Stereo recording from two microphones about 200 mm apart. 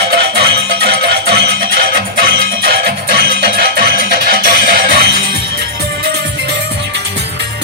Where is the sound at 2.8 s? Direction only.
50° right (ahead or behind).